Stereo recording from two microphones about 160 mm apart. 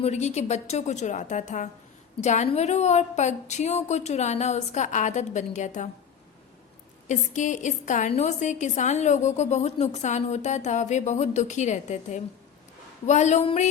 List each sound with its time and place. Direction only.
0.0 s a woman's voice: 45° left (ahead or behind)
7.1 s a woman's voice: 50° left (ahead or behind)